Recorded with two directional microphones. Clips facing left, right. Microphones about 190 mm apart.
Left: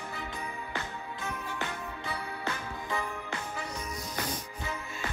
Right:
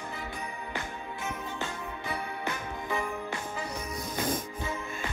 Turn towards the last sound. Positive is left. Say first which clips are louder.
# right 2 dB
turn(degrees=-25)  # may be behind; listen again after turning